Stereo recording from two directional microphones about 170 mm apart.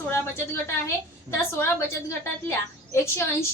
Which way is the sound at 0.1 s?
15° left (ahead or behind).